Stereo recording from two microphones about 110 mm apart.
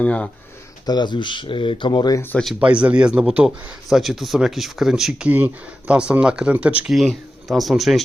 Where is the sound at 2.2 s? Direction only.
15° left (ahead or behind).